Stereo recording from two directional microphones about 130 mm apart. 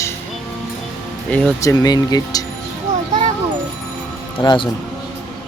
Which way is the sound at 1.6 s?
25° left (ahead or behind).